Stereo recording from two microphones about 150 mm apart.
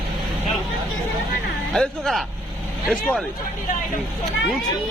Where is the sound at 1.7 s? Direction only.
Centre (ahead or behind).